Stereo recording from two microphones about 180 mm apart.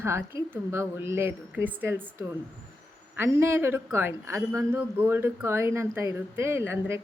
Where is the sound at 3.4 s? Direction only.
15° right (ahead or behind).